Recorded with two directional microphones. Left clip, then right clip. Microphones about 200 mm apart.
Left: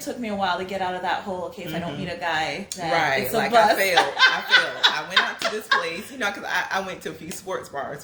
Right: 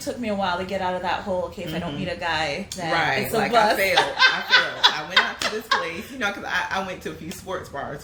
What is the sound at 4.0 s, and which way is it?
A woman's voice, 10° right (ahead or behind).